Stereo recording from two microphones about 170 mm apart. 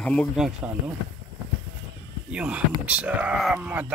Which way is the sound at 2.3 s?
10° right (ahead or behind).